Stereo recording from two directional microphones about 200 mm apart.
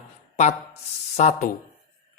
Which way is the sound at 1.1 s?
35° left (ahead or behind).